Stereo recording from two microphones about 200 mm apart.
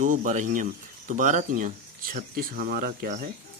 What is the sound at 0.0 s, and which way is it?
Speech, 40° right (ahead or behind).